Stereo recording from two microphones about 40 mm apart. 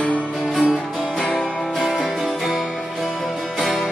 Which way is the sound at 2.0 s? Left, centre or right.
Centre.